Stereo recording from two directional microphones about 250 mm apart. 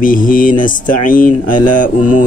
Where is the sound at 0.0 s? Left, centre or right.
Left.